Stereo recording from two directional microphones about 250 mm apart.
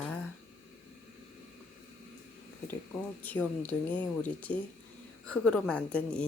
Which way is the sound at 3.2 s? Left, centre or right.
Centre.